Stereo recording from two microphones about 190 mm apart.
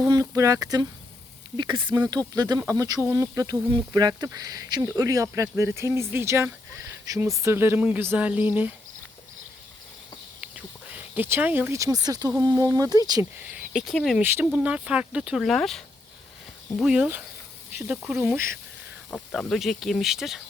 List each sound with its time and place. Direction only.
0.1 s speech: 15° right (ahead or behind)
10.4 s speech: 5° right (ahead or behind)
13.4 s speech: 5° right (ahead or behind)
14.2 s speech: 10° right (ahead or behind)
19.1 s speech: centre (ahead or behind)